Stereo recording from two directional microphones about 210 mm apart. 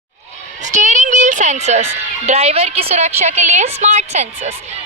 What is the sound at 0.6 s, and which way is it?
A woman's voice, 35° right (ahead or behind).